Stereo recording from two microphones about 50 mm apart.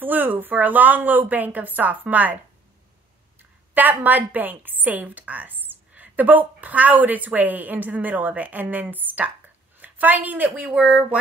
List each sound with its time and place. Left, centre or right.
0.0 s a woman's voice: right
3.7 s a woman's voice: right
10.8 s speech: right